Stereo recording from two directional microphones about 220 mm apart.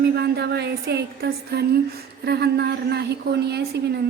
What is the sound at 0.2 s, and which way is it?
A woman's voice, 50° right (ahead or behind).